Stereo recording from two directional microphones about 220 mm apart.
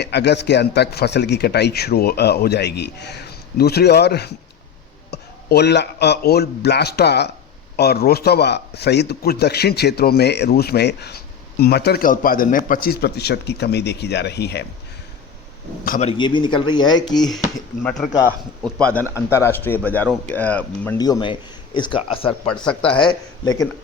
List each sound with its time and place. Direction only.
0.0 s speech: 50° left (ahead or behind)
15.8 s speech: 40° left (ahead or behind)
16.0 s speech: 20° left (ahead or behind)
17.8 s speech: centre (ahead or behind)
18.9 s a man's voice: 10° left (ahead or behind)
21.0 s speech: 20° left (ahead or behind)
22.4 s speech: 5° left (ahead or behind)
23.0 s speech: 20° left (ahead or behind)